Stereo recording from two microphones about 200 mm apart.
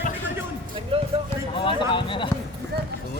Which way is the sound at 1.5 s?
25° left (ahead or behind).